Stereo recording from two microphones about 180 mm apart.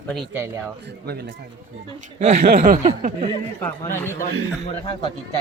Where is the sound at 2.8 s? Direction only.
35° right (ahead or behind).